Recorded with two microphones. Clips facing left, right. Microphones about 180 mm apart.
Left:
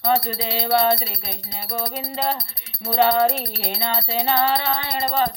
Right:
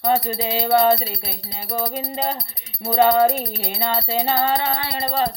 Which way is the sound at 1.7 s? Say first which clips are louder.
Right 3 dB; 45° right (ahead or behind).